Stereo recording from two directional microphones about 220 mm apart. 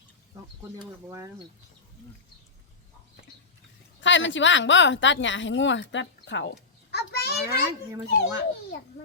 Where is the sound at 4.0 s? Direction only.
55° left (ahead or behind).